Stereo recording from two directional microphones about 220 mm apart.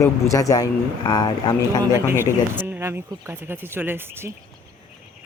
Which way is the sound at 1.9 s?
10° right (ahead or behind).